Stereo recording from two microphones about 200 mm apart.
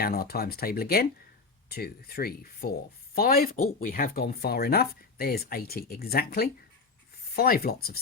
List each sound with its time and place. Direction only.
0.0 s speech: 50° left (ahead or behind)